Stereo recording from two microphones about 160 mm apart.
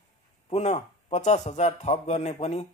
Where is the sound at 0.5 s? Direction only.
45° left (ahead or behind).